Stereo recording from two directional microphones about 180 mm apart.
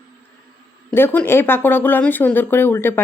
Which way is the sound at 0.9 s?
10° left (ahead or behind).